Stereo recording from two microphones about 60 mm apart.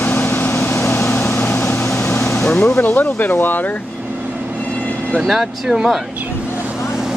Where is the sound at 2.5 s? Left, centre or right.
Left.